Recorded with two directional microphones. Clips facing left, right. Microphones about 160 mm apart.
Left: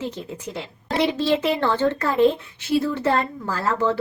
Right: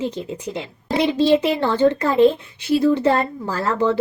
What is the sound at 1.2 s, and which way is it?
A woman's voice, 15° right (ahead or behind).